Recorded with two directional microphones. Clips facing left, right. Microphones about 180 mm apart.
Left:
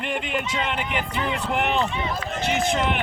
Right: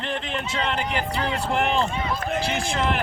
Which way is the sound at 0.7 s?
35° right (ahead or behind).